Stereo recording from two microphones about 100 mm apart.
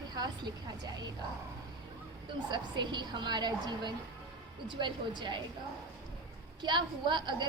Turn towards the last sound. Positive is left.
turn(degrees=-50)  # may be behind; listen again after turning